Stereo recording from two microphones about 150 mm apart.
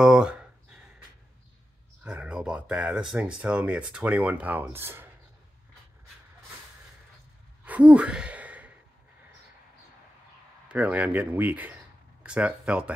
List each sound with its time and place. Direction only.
0.0 s a sound: 5° right (ahead or behind)
2.0 s speech: 5° right (ahead or behind)
7.6 s sigh: 10° right (ahead or behind)
10.7 s speech: 10° right (ahead or behind)